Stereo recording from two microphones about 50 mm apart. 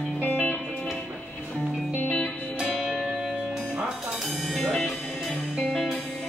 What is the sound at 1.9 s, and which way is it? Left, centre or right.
Music, left.